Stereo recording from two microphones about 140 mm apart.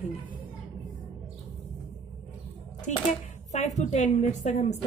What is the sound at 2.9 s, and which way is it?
A woman's voice, 55° left (ahead or behind).